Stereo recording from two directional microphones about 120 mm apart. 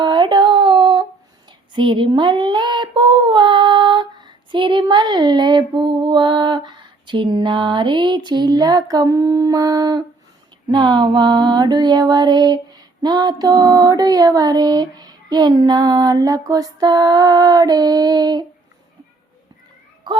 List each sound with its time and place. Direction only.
0.0 s a sound: 40° right (ahead or behind)
1.5 s child singing: 40° right (ahead or behind)
10.7 s female singing: 35° right (ahead or behind)